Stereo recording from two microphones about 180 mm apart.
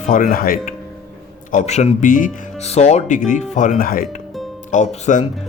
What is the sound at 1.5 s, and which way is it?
Speech, 40° left (ahead or behind).